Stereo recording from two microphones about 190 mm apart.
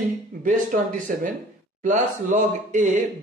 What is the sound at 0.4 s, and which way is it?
Speech, 45° right (ahead or behind).